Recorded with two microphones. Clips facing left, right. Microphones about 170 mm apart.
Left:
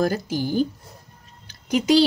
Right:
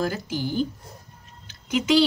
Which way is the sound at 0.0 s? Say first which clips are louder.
Left 4 dB; 40° left (ahead or behind).